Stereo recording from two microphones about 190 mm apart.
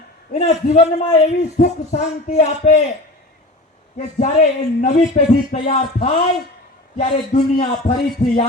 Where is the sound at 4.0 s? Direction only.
40° left (ahead or behind).